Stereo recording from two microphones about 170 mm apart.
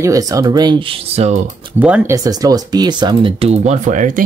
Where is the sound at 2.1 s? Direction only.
20° right (ahead or behind).